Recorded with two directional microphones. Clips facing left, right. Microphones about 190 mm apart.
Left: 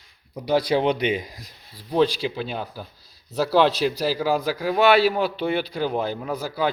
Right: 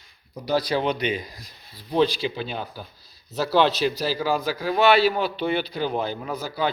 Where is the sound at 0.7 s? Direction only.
20° left (ahead or behind).